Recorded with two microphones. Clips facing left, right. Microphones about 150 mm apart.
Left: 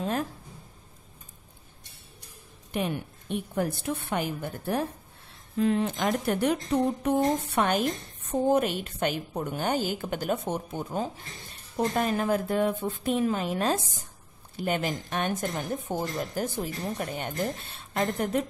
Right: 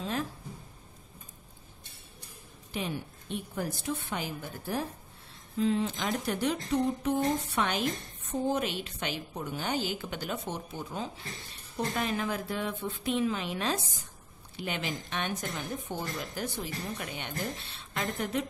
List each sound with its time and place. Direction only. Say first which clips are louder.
2.7 s a woman's voice: left 5 dB; 55° left (ahead or behind)